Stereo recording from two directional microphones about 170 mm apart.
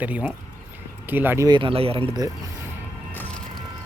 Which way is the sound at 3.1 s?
10° left (ahead or behind).